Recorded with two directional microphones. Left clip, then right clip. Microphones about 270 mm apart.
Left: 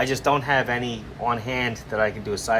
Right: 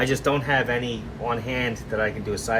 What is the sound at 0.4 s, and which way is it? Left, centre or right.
Speech, centre.